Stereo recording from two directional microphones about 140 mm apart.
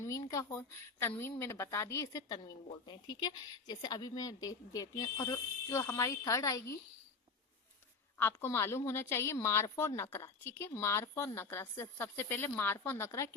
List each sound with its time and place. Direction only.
0.0 s a woman's voice: 25° left (ahead or behind)
8.2 s a woman's voice: 15° left (ahead or behind)